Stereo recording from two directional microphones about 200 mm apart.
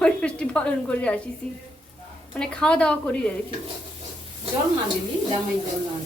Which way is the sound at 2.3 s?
5° left (ahead or behind).